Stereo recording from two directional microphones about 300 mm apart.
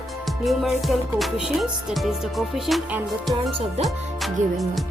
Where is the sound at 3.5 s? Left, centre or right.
Centre.